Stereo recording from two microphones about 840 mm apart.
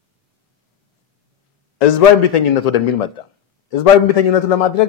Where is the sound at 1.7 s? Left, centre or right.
Left.